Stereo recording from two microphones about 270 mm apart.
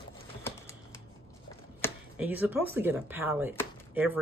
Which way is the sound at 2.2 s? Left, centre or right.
Centre.